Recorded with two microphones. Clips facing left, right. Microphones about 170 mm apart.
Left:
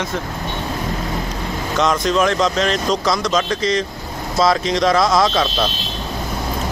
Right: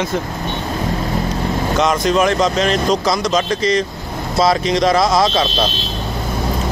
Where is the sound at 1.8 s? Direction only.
5° right (ahead or behind).